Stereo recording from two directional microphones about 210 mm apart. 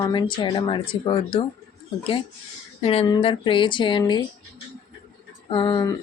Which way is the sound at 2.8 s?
25° left (ahead or behind).